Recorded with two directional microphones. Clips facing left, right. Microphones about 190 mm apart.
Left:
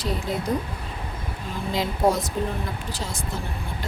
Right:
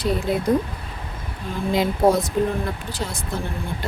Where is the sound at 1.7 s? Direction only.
55° right (ahead or behind).